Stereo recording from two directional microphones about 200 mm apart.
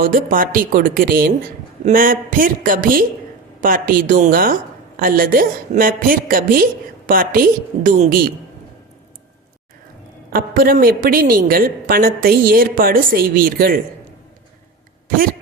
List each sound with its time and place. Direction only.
0.0 s a woman's voice: 45° right (ahead or behind)
10.3 s a woman's voice: 45° right (ahead or behind)